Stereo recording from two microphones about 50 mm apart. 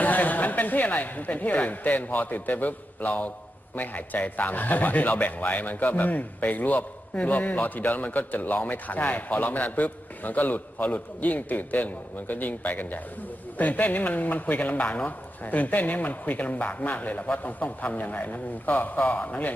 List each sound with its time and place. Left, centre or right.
0.0 s speech: left